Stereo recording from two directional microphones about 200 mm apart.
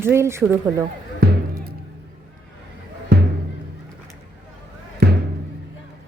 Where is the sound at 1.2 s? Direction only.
55° right (ahead or behind).